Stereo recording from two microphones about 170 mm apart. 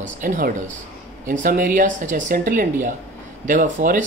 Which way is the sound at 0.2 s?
55° right (ahead or behind).